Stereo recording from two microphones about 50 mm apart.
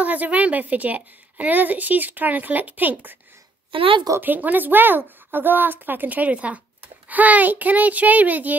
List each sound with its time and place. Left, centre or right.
0.0 s a woman's voice: right
4.2 s a woman's voice: right